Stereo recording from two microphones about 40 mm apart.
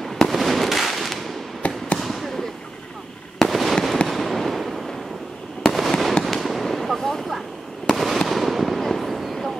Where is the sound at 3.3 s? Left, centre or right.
Centre.